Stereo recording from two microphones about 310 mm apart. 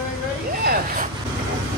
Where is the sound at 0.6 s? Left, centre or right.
Right.